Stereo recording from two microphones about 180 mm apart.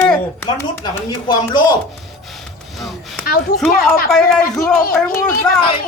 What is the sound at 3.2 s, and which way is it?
Speech, 55° left (ahead or behind).